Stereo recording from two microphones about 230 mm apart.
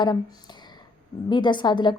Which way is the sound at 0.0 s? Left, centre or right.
Centre.